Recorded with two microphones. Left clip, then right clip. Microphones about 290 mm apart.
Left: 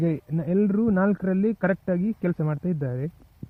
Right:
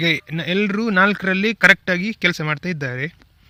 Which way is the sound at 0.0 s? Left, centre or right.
Centre.